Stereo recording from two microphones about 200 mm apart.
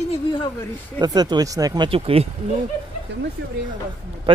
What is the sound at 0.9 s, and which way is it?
Speech, 20° right (ahead or behind).